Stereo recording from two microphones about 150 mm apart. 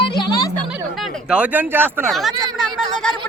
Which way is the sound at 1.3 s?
10° right (ahead or behind).